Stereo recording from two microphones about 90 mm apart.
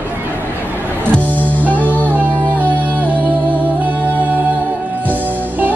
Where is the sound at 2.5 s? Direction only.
15° right (ahead or behind).